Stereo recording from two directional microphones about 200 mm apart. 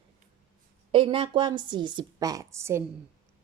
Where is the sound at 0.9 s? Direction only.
25° right (ahead or behind).